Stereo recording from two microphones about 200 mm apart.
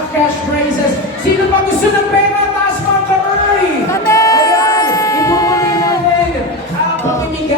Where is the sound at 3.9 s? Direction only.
15° left (ahead or behind).